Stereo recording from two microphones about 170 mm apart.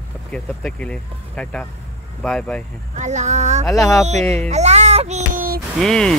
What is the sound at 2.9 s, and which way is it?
Speech, 45° right (ahead or behind).